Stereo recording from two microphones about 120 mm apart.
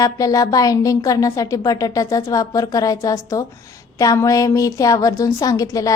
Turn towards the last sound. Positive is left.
turn(degrees=30)  # may be behind; listen again after turning